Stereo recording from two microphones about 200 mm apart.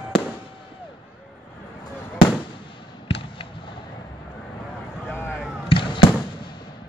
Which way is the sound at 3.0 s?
25° left (ahead or behind).